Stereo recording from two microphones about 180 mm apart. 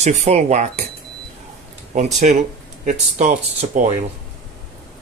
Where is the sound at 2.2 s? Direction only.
45° right (ahead or behind).